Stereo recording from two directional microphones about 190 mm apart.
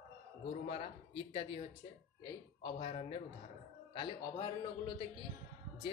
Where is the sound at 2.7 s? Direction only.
30° left (ahead or behind).